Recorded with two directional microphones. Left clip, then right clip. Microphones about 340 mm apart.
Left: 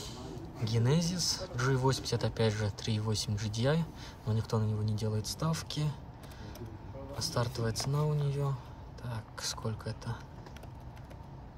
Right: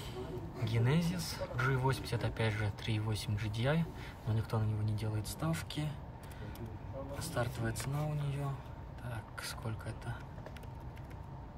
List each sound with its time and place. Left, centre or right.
0.0 s speech: centre
7.2 s speech: centre